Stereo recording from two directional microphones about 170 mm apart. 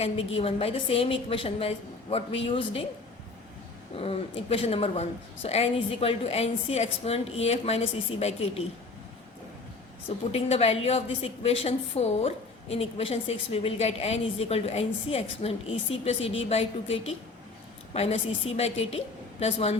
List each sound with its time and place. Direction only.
0.0 s a woman's voice: 35° left (ahead or behind)
3.9 s a woman's voice: 35° left (ahead or behind)
10.3 s a woman's voice: 35° left (ahead or behind)